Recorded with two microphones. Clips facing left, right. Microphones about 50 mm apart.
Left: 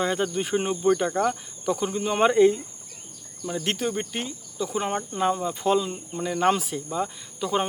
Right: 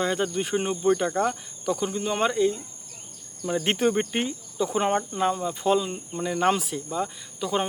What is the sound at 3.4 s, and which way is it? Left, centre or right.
Speech, right.